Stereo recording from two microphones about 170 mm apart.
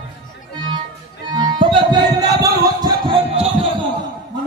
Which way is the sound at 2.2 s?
20° right (ahead or behind).